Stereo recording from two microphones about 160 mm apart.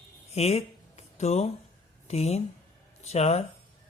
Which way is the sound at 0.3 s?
40° left (ahead or behind).